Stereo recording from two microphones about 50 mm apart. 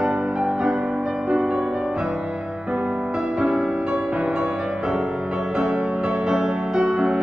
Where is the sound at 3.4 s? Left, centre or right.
Centre.